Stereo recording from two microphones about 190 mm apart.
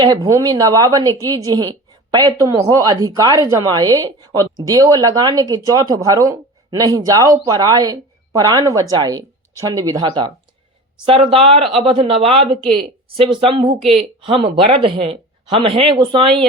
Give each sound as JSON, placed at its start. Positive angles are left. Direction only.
{"t": 0.0, "sound": "a woman's voice", "side_deg": -20}